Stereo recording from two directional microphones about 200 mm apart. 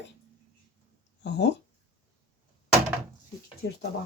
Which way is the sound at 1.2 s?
60° left (ahead or behind).